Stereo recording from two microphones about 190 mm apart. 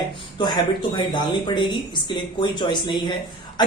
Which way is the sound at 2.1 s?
25° left (ahead or behind).